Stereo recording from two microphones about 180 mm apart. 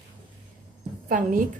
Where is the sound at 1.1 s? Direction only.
50° right (ahead or behind).